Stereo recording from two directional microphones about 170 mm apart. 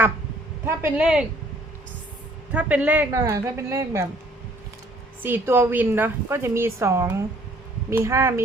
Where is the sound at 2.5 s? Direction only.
10° right (ahead or behind).